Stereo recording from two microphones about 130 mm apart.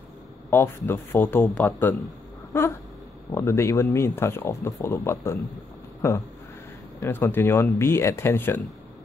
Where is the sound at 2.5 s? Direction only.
20° left (ahead or behind).